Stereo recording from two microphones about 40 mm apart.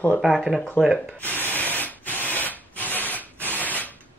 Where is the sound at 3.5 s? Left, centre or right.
Left.